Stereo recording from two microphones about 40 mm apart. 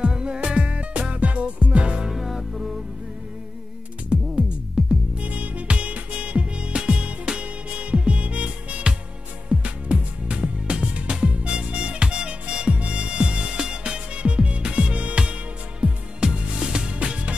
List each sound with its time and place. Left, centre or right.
0.0 s music: right
2.0 s music: centre
4.1 s music: right
4.8 s music: centre
5.1 s music: right